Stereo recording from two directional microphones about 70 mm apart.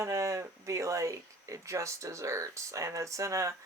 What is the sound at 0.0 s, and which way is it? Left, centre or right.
Speech, right.